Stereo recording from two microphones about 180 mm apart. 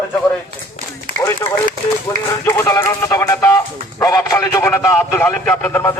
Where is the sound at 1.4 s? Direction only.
15° left (ahead or behind).